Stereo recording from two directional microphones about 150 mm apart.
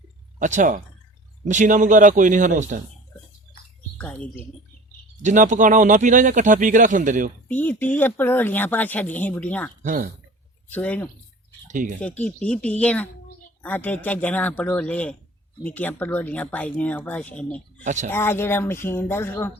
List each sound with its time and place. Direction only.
0.3 s speech: 55° right (ahead or behind)
3.9 s speech: 10° left (ahead or behind)
5.2 s speech: 55° right (ahead or behind)
7.4 s speech: 10° left (ahead or behind)
9.8 s speech: 60° right (ahead or behind)
10.7 s speech: 10° left (ahead or behind)
11.7 s speech: 60° right (ahead or behind)
11.9 s speech: 10° left (ahead or behind)
17.8 s speech: 55° right (ahead or behind)
18.1 s speech: 15° left (ahead or behind)